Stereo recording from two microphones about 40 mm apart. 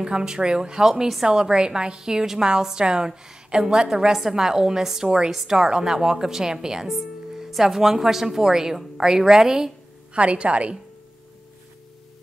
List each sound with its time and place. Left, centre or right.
0.0 s speech: centre
10.1 s a woman's voice: right